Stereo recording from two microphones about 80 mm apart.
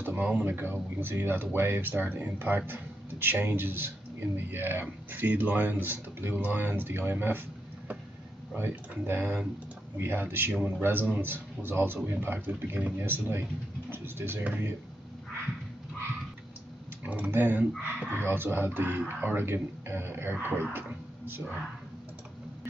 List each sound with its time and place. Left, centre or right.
0.0 s speech: right
8.5 s speech: right
17.0 s speech: centre